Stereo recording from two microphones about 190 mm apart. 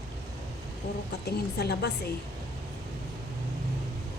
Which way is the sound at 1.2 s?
55° left (ahead or behind).